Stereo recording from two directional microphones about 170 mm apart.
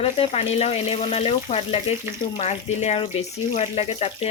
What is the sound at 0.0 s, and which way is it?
Speech, 35° left (ahead or behind).